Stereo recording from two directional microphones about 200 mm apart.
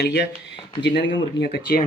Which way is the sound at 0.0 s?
55° left (ahead or behind).